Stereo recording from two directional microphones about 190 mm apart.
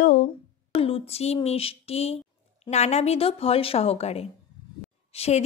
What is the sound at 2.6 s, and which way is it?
A woman's voice, 35° left (ahead or behind).